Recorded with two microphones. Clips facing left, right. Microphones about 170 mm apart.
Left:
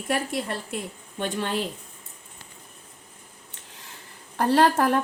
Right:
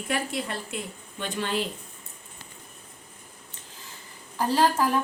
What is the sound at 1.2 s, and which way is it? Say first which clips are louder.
Speech: left 2 dB; 50° left (ahead or behind).